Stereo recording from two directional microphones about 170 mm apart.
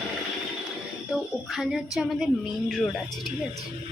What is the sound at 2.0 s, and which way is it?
A woman's voice, centre (ahead or behind).